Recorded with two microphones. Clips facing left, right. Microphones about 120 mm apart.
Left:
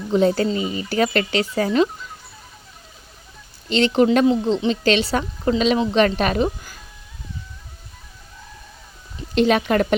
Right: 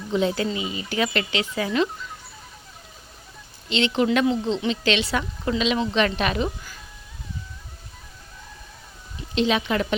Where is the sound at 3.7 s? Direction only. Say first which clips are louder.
Left 5 dB; 40° left (ahead or behind).